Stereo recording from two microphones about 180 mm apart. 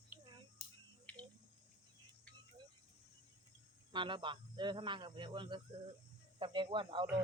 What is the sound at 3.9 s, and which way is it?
Speech, 25° right (ahead or behind).